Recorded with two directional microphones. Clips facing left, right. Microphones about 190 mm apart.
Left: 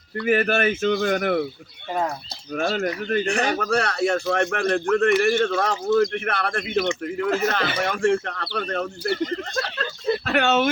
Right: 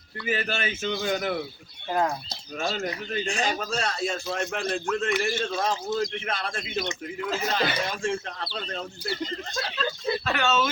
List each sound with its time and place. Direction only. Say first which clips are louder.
0.3 s speech: left 9 dB; 55° left (ahead or behind)
1.9 s speech: even; centre (ahead or behind)
2.5 s speech: left 6 dB; 50° left (ahead or behind)
5.7 s speech: left 8 dB; 50° left (ahead or behind)